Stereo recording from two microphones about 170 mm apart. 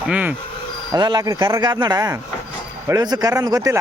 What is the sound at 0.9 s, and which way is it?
Speech, 25° right (ahead or behind).